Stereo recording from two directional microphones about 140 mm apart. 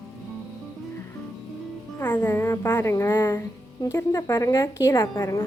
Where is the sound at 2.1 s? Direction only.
15° left (ahead or behind).